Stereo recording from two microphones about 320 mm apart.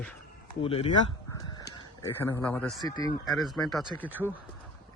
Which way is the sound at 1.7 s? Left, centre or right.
Centre.